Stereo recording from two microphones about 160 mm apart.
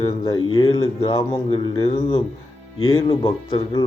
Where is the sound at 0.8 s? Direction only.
40° left (ahead or behind).